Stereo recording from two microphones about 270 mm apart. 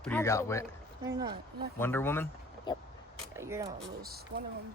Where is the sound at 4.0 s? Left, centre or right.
Right.